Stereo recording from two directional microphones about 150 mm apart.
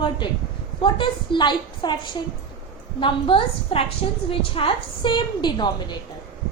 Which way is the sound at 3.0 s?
35° left (ahead or behind).